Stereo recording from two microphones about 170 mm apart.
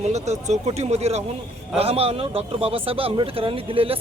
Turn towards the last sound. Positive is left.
turn(degrees=-35)  # may be behind; listen again after turning